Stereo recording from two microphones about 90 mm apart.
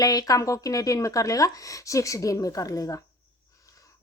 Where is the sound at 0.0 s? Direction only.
45° left (ahead or behind).